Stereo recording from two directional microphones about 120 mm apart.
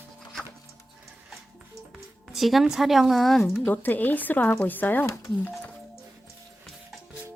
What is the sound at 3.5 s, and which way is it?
Speech, 15° left (ahead or behind).